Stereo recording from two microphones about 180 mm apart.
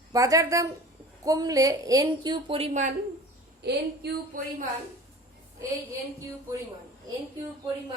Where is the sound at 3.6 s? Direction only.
65° right (ahead or behind).